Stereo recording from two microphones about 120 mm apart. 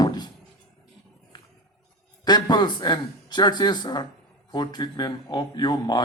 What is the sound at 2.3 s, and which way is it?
A man's voice, 35° left (ahead or behind).